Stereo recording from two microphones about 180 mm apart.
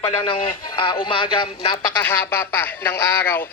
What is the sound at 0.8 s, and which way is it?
Music, 30° left (ahead or behind).